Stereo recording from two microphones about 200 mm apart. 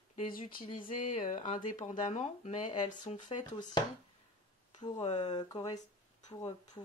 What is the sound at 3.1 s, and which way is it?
Speech, 25° left (ahead or behind).